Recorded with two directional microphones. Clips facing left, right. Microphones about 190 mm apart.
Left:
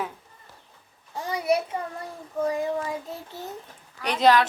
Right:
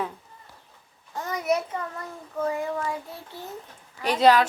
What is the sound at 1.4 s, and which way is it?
Child singing, 30° left (ahead or behind).